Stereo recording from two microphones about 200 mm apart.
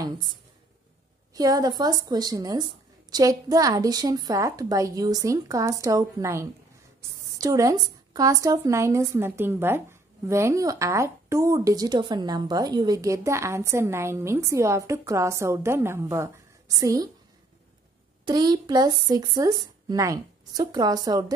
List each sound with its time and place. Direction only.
1.3 s a woman's voice: 20° right (ahead or behind)
18.2 s speech: 20° right (ahead or behind)